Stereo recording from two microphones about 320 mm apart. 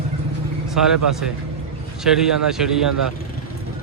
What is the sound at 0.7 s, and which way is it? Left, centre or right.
Speech, centre.